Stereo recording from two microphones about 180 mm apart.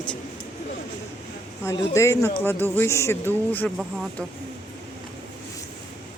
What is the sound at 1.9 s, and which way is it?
Speech, 15° left (ahead or behind).